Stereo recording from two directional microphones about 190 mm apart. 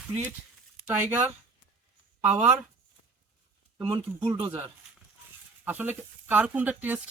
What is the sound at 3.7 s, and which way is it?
Speech, 25° right (ahead or behind).